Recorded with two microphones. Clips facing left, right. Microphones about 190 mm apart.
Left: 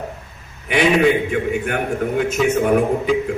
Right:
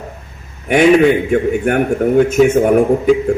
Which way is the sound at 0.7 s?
50° right (ahead or behind).